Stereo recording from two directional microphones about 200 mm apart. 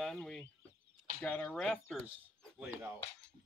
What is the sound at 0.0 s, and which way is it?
Chicken, centre (ahead or behind).